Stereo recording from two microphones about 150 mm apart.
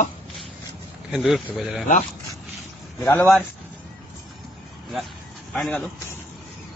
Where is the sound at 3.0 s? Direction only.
15° left (ahead or behind).